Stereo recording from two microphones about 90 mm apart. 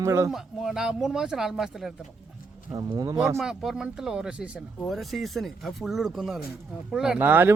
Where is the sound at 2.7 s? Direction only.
45° right (ahead or behind).